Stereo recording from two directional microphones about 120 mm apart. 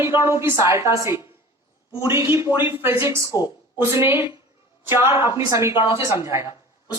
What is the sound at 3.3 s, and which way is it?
Speech, 35° left (ahead or behind).